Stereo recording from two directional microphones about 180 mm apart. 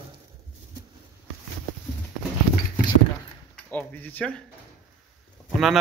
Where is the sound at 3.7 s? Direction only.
10° left (ahead or behind).